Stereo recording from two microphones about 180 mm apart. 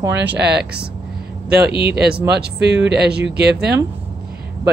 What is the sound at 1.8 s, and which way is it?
Speech, 65° right (ahead or behind).